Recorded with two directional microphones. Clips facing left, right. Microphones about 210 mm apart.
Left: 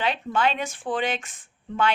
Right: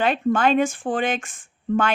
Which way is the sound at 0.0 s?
50° right (ahead or behind).